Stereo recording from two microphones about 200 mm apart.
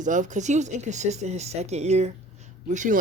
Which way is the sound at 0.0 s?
40° right (ahead or behind).